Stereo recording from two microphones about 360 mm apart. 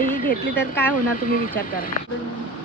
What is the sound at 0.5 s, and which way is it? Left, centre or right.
Speech, centre.